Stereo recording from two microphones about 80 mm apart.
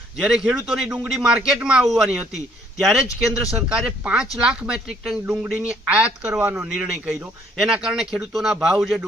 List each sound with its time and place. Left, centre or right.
0.2 s speech: centre
5.2 s speech: right; by 9.0 s centre